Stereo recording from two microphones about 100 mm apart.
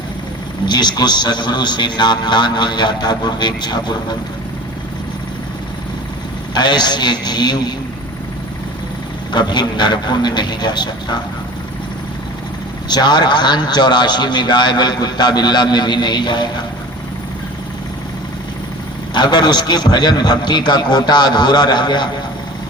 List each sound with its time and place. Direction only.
0.6 s a man's voice: 45° left (ahead or behind)
6.5 s a man's voice: 50° left (ahead or behind)
9.3 s a man's voice: 50° left (ahead or behind)
12.9 s a man's voice: 45° left (ahead or behind)
19.1 s a man's voice: 45° left (ahead or behind)